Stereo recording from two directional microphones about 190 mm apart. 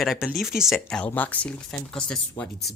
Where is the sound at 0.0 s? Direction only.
Centre (ahead or behind).